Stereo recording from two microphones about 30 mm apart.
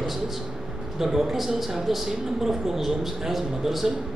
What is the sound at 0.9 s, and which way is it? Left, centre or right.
Speech, centre.